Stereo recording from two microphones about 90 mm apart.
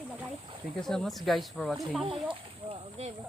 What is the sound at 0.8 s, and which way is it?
Speech, 5° left (ahead or behind).